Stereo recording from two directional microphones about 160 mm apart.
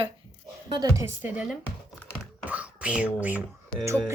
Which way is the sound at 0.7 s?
25° right (ahead or behind).